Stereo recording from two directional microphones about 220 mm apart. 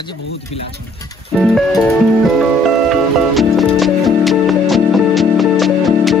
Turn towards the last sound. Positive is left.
turn(degrees=0)  # may be behind; listen again after turning